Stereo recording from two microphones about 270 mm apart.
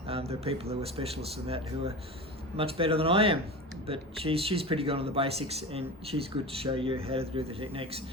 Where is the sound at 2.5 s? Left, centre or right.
Right.